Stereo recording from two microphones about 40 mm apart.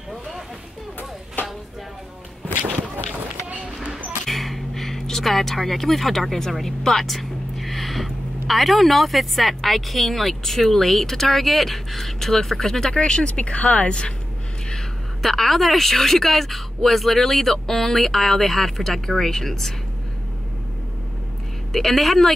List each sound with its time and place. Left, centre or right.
1.4 s chopping: left
3.6 s a sound: right
4.3 s speech: centre
13.3 s speech: left
15.2 s speech: centre
21.7 s speech: centre